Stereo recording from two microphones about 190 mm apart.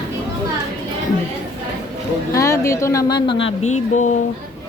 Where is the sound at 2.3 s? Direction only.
15° left (ahead or behind).